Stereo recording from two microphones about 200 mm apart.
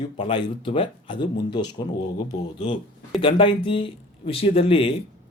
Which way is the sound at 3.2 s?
25° left (ahead or behind).